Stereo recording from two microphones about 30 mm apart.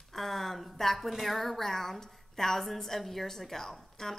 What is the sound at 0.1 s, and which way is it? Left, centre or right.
A woman's voice, centre.